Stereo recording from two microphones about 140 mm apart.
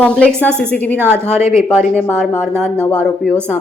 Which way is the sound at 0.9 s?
15° right (ahead or behind).